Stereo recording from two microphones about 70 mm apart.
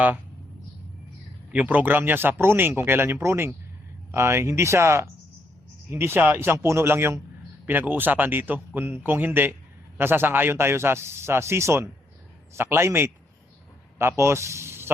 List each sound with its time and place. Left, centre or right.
1.5 s a man's voice: right